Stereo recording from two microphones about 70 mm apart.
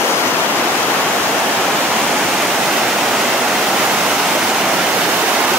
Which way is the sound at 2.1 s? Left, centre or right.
Centre.